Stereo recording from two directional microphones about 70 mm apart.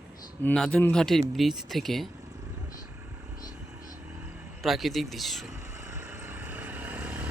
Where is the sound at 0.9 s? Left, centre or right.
Centre.